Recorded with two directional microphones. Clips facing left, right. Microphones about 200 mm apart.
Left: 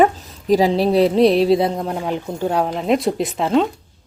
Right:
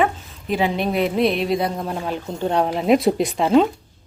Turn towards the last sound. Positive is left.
turn(degrees=0)  # may be behind; listen again after turning